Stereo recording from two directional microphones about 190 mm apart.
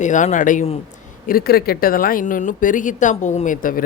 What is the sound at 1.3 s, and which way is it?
A man's voice, 50° left (ahead or behind).